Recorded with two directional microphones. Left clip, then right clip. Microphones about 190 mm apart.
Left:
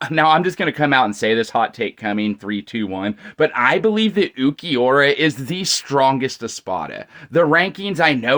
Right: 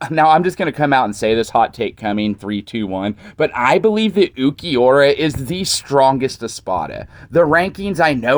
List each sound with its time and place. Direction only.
0.0 s speech: 30° right (ahead or behind)